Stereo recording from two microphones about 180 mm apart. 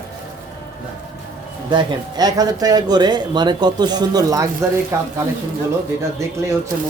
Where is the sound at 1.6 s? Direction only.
25° right (ahead or behind).